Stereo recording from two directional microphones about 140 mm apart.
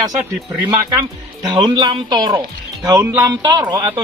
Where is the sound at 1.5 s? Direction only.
30° right (ahead or behind).